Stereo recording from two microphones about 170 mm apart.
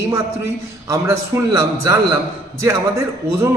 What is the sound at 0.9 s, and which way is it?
A man's voice, 20° right (ahead or behind).